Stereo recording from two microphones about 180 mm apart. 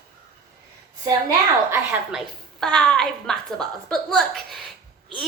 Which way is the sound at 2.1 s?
Centre (ahead or behind).